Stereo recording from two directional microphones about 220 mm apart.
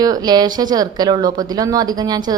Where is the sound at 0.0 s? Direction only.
15° right (ahead or behind).